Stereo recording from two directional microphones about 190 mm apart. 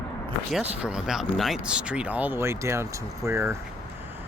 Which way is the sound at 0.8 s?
5° right (ahead or behind).